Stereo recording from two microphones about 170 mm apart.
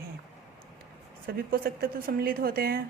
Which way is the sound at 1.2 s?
60° right (ahead or behind).